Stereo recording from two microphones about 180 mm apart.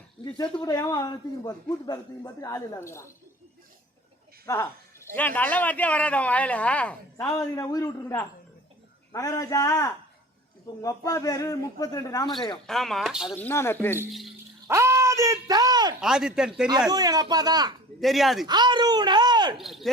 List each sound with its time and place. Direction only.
0.6 s speech: 20° left (ahead or behind)
4.4 s speech: 15° left (ahead or behind)
7.3 s speech: 20° left (ahead or behind)
12.6 s speech: centre (ahead or behind)
13.3 s speech: 10° left (ahead or behind)
14.1 s speech: centre (ahead or behind)
14.7 s a sound: 15° right (ahead or behind)
16.0 s speech: 5° right (ahead or behind)
16.9 s speech: 20° right (ahead or behind)
18.0 s speech: centre (ahead or behind)
18.4 s speech: 25° right (ahead or behind)
19.5 s speech: centre (ahead or behind)